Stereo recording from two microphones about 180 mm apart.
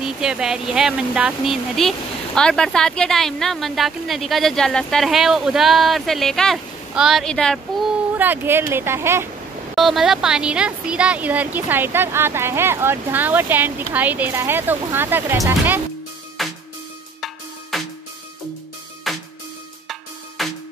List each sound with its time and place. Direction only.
0.0 s speech: 5° right (ahead or behind)
8.2 s speech: 10° right (ahead or behind)
9.8 s speech: centre (ahead or behind)
16.4 s music: centre (ahead or behind)
19.1 s music: centre (ahead or behind)
20.4 s music: centre (ahead or behind)